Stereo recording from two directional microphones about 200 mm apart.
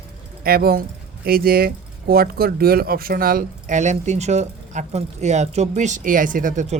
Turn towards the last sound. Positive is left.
turn(degrees=-40)  # may be behind; listen again after turning